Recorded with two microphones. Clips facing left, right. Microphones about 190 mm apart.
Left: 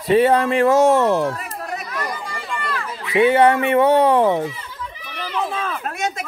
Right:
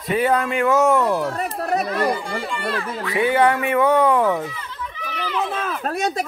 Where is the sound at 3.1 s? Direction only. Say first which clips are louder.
Left 4 dB; 25° left (ahead or behind).